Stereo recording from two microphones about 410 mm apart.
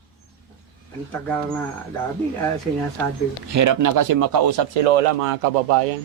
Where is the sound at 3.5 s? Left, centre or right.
Right.